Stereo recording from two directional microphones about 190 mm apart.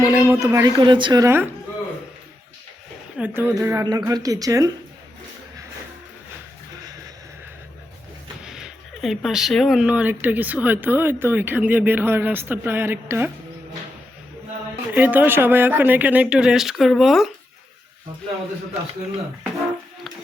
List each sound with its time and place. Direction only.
0.0 s speech: 15° right (ahead or behind)
3.2 s speech: 10° right (ahead or behind)
8.4 s speech: 5° right (ahead or behind)
14.9 s speech: 10° right (ahead or behind)